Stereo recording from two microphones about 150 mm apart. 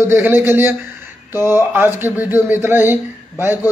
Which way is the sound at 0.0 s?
15° right (ahead or behind).